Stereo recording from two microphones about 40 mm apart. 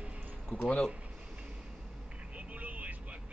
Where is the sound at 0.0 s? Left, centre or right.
Right.